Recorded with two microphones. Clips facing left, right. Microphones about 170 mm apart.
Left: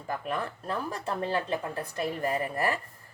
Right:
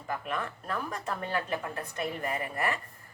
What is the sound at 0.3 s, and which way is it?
A woman's voice, 30° left (ahead or behind).